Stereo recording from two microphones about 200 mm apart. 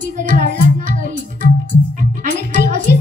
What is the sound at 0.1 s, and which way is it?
Music, 40° right (ahead or behind).